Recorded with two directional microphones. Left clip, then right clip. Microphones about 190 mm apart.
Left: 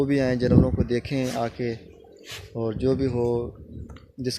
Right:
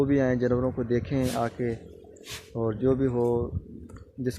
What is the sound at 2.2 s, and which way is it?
Speech, 5° left (ahead or behind).